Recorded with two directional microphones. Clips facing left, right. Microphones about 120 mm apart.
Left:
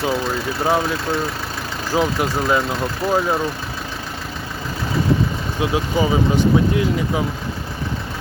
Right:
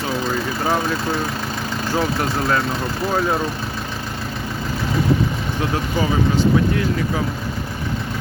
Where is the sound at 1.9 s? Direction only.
15° left (ahead or behind).